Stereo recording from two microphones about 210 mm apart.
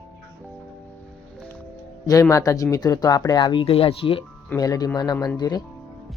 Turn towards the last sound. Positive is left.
turn(degrees=20)  # may be behind; listen again after turning